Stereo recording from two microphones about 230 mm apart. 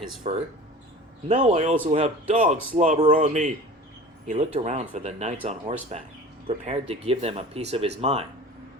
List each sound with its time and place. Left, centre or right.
0.2 s speech: right